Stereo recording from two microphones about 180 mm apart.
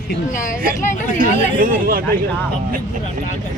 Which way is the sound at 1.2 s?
50° right (ahead or behind).